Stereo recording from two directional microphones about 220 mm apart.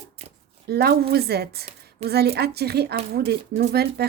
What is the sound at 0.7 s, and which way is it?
Speech, 45° right (ahead or behind).